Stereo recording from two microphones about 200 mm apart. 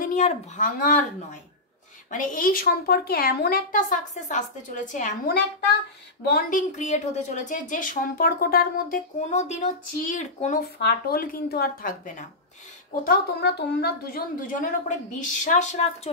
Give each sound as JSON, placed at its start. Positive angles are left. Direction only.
{"t": 0.0, "sound": "a woman's voice", "side_deg": 35}